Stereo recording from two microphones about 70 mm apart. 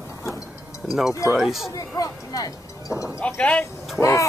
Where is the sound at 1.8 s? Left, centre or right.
Left.